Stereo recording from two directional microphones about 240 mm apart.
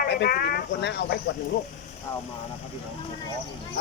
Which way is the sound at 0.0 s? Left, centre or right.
Left.